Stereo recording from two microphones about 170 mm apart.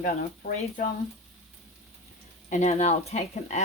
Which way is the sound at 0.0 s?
50° left (ahead or behind).